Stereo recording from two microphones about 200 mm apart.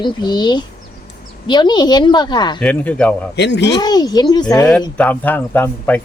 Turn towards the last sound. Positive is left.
turn(degrees=10)  # may be behind; listen again after turning